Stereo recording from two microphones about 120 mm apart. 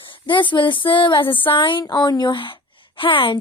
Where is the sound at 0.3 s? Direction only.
40° left (ahead or behind).